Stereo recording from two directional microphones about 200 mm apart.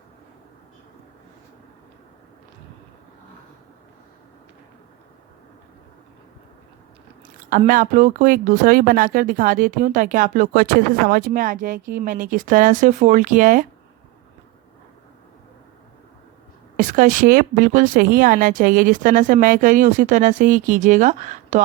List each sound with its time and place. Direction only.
7.7 s speech: 40° right (ahead or behind)
16.7 s speech: 40° right (ahead or behind)